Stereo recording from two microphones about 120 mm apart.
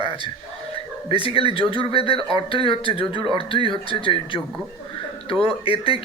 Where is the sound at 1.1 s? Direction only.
50° left (ahead or behind).